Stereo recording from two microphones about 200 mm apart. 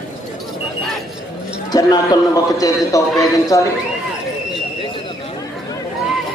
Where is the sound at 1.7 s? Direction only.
20° left (ahead or behind).